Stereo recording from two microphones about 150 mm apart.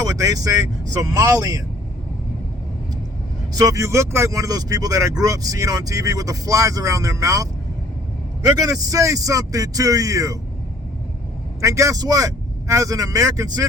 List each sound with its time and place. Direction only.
0.0 s speech: 20° right (ahead or behind)
3.6 s speech: 20° right (ahead or behind)
8.4 s speech: 25° right (ahead or behind)
11.6 s speech: 20° right (ahead or behind)